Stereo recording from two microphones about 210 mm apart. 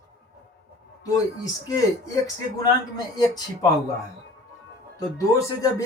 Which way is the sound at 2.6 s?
20° left (ahead or behind).